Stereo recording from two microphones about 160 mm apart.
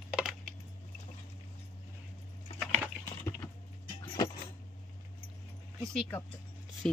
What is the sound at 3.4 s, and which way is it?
Vehicle, 20° left (ahead or behind).